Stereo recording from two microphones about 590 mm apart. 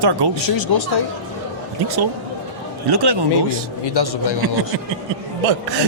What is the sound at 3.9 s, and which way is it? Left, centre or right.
Speech, left.